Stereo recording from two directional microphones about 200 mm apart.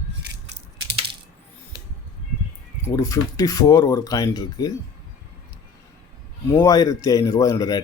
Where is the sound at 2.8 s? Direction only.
15° left (ahead or behind).